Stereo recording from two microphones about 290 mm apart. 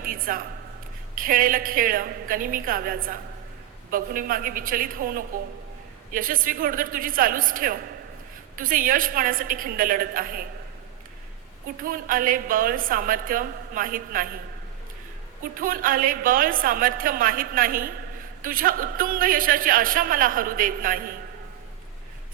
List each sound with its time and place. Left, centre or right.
0.0 s speech: right
11.8 s speech: right
15.5 s speech: right